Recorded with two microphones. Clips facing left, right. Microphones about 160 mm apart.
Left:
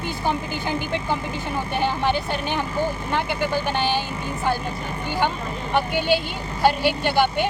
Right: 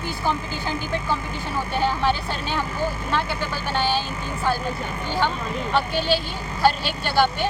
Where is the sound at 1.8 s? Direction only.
15° left (ahead or behind).